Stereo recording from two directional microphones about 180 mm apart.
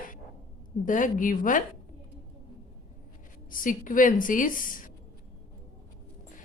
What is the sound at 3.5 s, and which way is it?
Speech, 50° left (ahead or behind).